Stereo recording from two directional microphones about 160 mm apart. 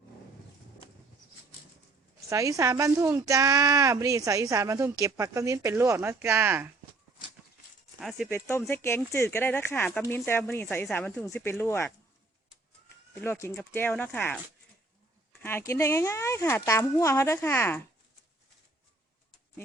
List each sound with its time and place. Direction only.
2.3 s a woman's voice: 20° right (ahead or behind)
7.9 s speech: centre (ahead or behind)
8.7 s speech: 15° left (ahead or behind)
13.2 s speech: 15° left (ahead or behind)